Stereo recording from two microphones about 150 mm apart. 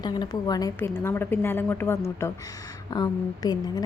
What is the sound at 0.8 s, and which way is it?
A woman's voice, 15° left (ahead or behind).